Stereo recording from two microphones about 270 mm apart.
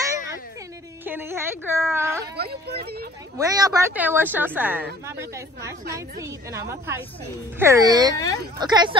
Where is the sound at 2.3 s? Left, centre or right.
Right.